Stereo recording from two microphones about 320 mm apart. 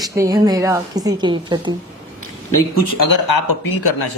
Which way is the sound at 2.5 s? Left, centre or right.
Left.